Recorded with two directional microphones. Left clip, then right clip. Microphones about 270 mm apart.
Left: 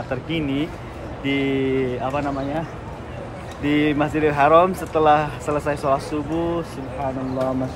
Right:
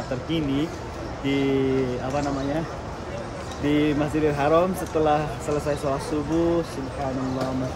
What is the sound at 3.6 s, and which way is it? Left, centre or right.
Speech, centre.